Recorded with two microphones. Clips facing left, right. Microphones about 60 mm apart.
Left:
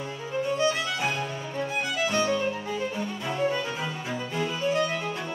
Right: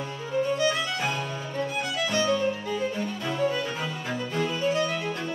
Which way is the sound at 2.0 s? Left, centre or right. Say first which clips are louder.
Right 2 dB; left.